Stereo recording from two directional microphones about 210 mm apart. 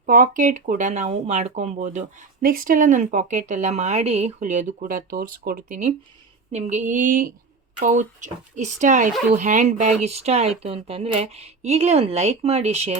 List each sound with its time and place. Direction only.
0.0 s speech: 40° right (ahead or behind)